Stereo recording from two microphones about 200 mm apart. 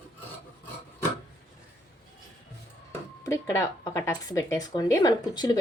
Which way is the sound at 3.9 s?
15° left (ahead or behind).